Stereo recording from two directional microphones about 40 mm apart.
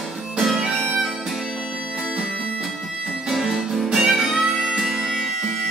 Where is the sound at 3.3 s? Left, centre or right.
Centre.